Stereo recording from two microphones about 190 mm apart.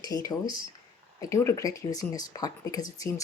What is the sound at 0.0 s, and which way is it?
Speech, 20° left (ahead or behind).